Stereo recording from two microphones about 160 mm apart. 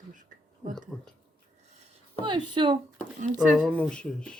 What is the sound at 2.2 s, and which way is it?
Speech, 30° right (ahead or behind).